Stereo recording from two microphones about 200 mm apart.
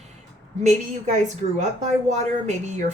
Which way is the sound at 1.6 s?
35° right (ahead or behind).